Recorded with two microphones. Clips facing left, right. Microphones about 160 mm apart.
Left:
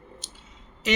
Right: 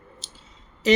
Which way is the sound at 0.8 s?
35° right (ahead or behind).